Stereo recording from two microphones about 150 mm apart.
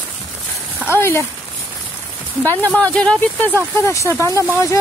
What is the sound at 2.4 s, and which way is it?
Speech, 10° left (ahead or behind).